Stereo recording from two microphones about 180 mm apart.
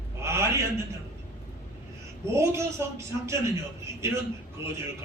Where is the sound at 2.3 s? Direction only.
15° right (ahead or behind).